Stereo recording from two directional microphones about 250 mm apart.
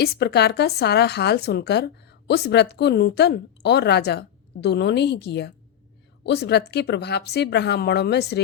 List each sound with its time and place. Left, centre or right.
0.0 s speech: left